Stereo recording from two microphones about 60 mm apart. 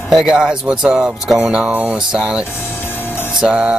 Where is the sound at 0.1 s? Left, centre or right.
Centre.